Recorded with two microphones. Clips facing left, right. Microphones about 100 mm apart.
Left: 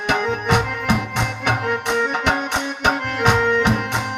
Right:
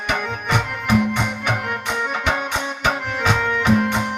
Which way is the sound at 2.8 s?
65° left (ahead or behind).